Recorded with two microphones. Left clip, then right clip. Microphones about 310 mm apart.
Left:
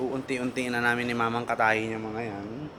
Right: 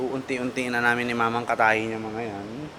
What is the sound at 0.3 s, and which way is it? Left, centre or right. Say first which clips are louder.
A man's voice: right 2 dB; centre.